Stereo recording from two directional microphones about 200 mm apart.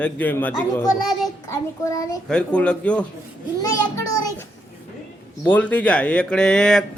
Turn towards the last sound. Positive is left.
turn(degrees=5)  # may be behind; listen again after turning